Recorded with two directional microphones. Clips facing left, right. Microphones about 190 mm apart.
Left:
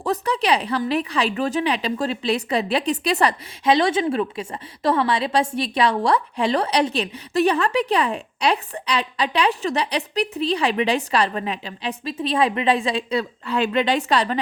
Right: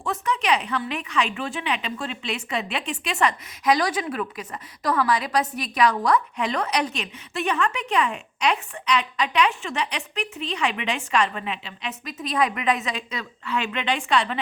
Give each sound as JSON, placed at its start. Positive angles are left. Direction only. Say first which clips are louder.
{"t": 0.0, "sound": "a woman's voice", "louder": "left 4 dB", "side_deg": 35}